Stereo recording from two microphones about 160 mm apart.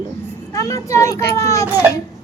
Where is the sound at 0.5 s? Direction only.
20° left (ahead or behind).